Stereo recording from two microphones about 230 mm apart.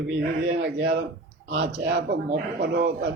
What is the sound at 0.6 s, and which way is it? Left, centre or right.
A man's voice, right.